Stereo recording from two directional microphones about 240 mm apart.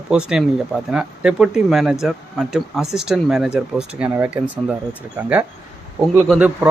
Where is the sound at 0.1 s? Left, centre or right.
Centre.